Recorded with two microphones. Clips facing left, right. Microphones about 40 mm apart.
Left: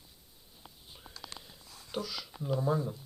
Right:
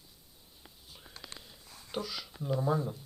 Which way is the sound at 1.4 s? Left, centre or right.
Centre.